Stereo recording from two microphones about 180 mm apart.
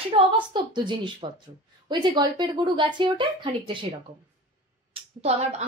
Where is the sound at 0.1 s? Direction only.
25° right (ahead or behind).